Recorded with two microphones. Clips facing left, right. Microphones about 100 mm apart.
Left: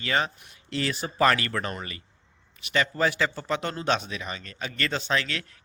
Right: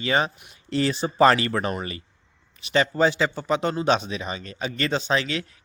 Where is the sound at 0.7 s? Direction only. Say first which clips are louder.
Right 6 dB; 30° right (ahead or behind).